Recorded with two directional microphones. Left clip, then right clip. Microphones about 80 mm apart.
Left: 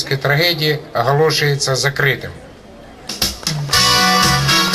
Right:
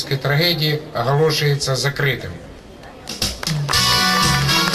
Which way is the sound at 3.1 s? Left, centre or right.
Left.